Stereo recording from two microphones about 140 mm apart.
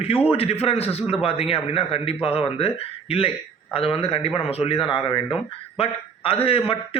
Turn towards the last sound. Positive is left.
turn(degrees=40)  # may be behind; listen again after turning